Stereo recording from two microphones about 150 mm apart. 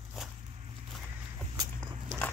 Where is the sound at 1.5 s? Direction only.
25° right (ahead or behind).